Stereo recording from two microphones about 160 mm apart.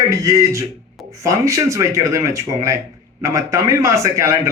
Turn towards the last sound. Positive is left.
turn(degrees=-20)  # may be behind; listen again after turning